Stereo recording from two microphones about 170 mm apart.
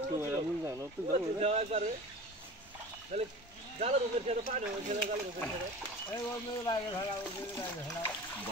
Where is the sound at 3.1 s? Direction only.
40° right (ahead or behind).